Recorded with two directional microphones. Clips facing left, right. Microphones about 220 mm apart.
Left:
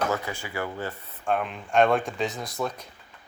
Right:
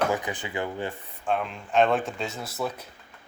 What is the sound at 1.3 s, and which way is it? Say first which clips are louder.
Speech: left 1 dB; centre (ahead or behind).